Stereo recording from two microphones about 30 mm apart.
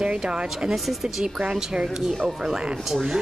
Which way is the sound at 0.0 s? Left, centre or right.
Right.